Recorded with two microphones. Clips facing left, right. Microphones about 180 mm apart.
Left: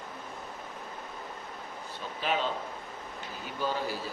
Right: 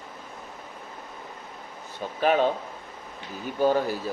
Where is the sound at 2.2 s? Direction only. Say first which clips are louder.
Right 9 dB; 50° right (ahead or behind).